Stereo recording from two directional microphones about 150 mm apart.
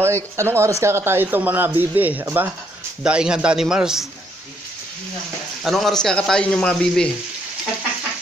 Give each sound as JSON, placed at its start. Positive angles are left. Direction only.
{"t": 0.0, "sound": "speech", "side_deg": -20}
{"t": 5.6, "sound": "speech", "side_deg": 0}